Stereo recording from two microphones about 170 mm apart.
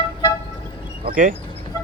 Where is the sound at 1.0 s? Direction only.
50° right (ahead or behind).